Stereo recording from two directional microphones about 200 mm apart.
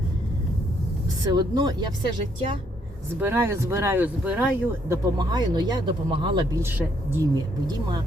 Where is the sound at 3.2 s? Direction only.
10° right (ahead or behind).